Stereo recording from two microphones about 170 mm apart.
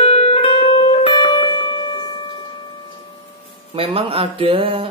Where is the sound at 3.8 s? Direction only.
35° right (ahead or behind).